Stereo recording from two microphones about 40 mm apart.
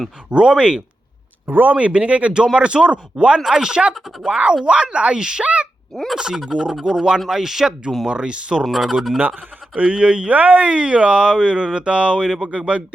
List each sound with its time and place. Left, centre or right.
0.3 s speech: right
1.5 s speech: right
1.7 s speech: right
3.4 s speech: centre
5.9 s speech: centre
6.1 s speech: centre
7.3 s speech: centre
8.1 s speech: right
8.6 s speech: centre
9.7 s speech: right
10.3 s speech: right
10.7 s speech: right